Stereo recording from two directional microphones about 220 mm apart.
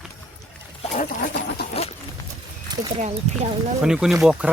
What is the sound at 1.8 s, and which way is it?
Horse, 25° left (ahead or behind).